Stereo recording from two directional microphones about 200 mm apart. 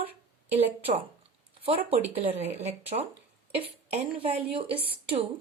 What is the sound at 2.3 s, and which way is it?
Speech, 30° right (ahead or behind).